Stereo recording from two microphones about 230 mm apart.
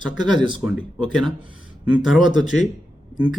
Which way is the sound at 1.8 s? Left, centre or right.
Centre.